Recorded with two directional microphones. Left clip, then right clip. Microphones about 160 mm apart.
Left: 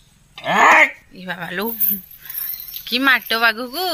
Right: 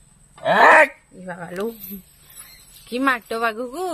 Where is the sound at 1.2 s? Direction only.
5° left (ahead or behind).